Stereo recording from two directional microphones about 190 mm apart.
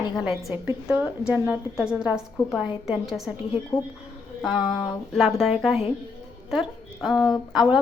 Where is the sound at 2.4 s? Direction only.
20° left (ahead or behind).